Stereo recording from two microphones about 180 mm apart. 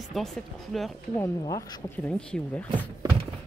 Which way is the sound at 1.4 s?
20° left (ahead or behind).